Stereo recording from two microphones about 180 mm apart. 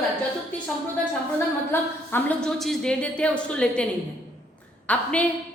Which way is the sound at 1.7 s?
10° left (ahead or behind).